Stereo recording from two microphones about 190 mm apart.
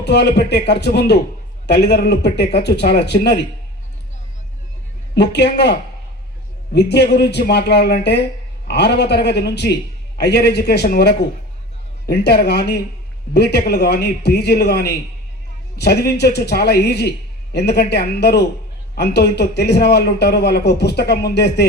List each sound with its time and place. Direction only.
0.0 s a man's voice: 60° left (ahead or behind)
5.1 s a man's voice: 60° left (ahead or behind)
6.7 s a man's voice: 60° left (ahead or behind)